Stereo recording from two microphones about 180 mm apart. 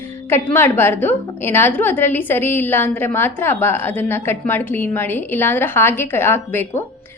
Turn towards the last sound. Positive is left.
turn(degrees=10)  # may be behind; listen again after turning